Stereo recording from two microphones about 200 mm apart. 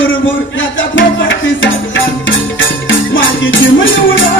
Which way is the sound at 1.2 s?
70° left (ahead or behind).